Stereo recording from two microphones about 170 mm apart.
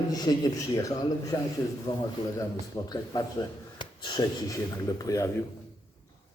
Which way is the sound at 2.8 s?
20° left (ahead or behind).